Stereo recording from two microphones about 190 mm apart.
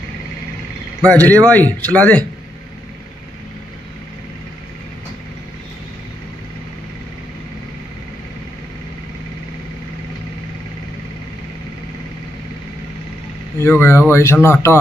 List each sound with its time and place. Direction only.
1.0 s speech: 5° left (ahead or behind)
13.6 s speech: 10° left (ahead or behind)